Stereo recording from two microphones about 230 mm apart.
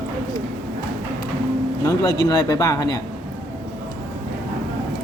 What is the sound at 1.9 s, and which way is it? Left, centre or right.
Speech, centre.